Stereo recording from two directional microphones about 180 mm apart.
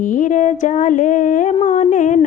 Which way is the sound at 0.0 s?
45° left (ahead or behind).